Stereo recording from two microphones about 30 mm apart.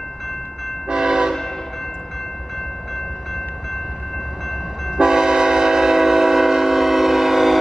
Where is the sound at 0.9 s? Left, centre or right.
Right.